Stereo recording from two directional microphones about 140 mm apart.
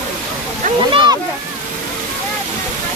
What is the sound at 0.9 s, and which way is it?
Speech, 35° right (ahead or behind).